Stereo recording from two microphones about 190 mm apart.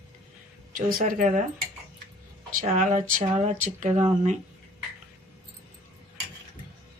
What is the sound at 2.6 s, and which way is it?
Speech, 40° right (ahead or behind).